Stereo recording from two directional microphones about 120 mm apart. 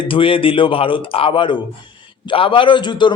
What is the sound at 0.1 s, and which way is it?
A man's voice, 45° left (ahead or behind).